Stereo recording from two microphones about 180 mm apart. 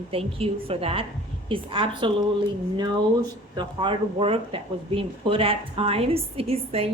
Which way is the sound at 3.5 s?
30° right (ahead or behind).